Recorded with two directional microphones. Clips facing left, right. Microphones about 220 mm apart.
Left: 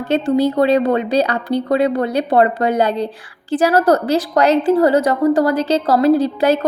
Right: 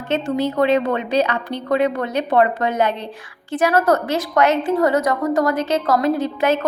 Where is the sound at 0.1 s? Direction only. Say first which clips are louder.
Left 5 dB; 35° left (ahead or behind).